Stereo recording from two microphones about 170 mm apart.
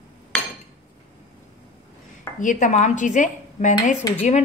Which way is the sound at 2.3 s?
50° left (ahead or behind).